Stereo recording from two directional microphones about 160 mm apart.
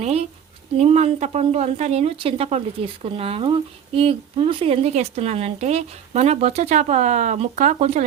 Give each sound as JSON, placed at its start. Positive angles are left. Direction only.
{"t": 0.0, "sound": "a woman's voice", "side_deg": -40}